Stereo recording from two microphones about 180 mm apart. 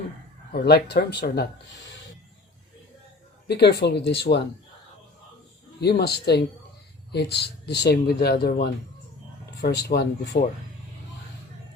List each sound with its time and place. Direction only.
0.5 s speech: 65° left (ahead or behind)
3.4 s speech: 65° left (ahead or behind)
5.8 s speech: 65° left (ahead or behind)